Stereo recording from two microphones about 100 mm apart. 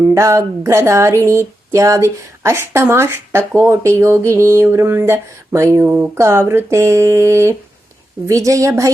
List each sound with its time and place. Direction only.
0.1 s a woman's voice: 30° right (ahead or behind)